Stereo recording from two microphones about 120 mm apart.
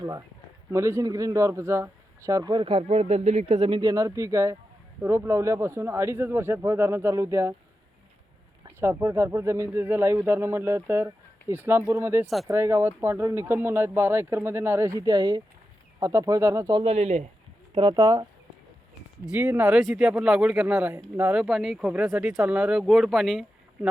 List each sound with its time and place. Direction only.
0.0 s speech: 30° right (ahead or behind)
2.8 s speech: 60° right (ahead or behind)
3.4 s speech: 45° right (ahead or behind); by 7.5 s 25° right (ahead or behind)
8.8 s speech: 20° right (ahead or behind)
15.0 s speech: 35° right (ahead or behind)
16.8 s speech: 55° right (ahead or behind)
17.9 s speech: 35° right (ahead or behind)
19.7 s speech: centre (ahead or behind); by 21.4 s 15° right (ahead or behind)
21.4 s speech: centre (ahead or behind)